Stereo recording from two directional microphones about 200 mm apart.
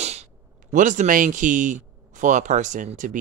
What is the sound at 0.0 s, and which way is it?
Speech, 35° right (ahead or behind).